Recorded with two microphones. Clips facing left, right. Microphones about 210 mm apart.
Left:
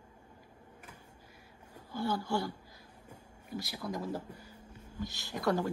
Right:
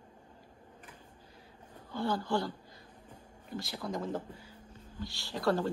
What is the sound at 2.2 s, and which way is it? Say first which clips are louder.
Speech: right 1 dB; 10° left (ahead or behind).